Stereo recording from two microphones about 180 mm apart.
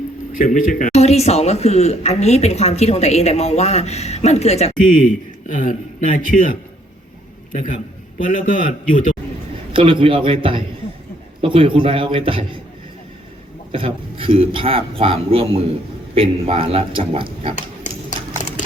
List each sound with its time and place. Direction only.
0.3 s a man's voice: 50° left (ahead or behind)
7.5 s a man's voice: 50° left (ahead or behind)
9.7 s a man's voice: 30° right (ahead or behind)
13.7 s speech: 30° right (ahead or behind)